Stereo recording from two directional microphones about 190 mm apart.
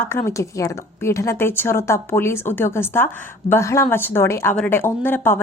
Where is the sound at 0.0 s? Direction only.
15° left (ahead or behind).